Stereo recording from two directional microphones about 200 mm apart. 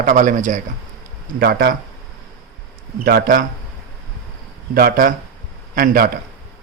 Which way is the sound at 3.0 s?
45° right (ahead or behind).